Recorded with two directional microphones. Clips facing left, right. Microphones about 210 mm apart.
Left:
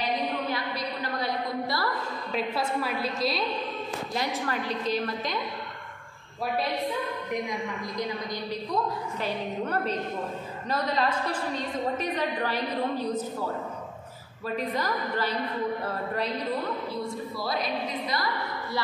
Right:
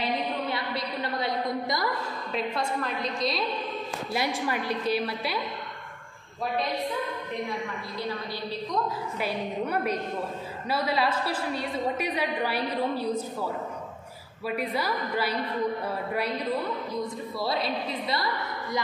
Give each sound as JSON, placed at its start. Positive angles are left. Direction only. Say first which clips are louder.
{"t": 1.0, "sound": "a sound", "louder": "right 2 dB", "side_deg": -20}
{"t": 2.3, "sound": "a woman's voice", "louder": "left 1 dB", "side_deg": 5}
{"t": 4.1, "sound": "a woman's voice", "louder": "right 3 dB", "side_deg": -10}
{"t": 9.2, "sound": "a woman's voice", "louder": "right 1 dB", "side_deg": -10}
{"t": 14.6, "sound": "a woman's voice", "louder": "even", "side_deg": -10}
{"t": 17.4, "sound": "a woman's voice", "louder": "right 2 dB", "side_deg": -25}